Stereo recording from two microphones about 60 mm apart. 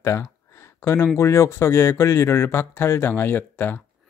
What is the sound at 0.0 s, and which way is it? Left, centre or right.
Speech, left.